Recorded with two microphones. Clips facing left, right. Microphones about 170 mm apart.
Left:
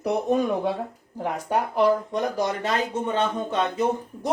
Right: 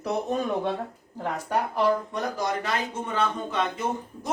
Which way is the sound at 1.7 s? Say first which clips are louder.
Left 5 dB; 20° left (ahead or behind).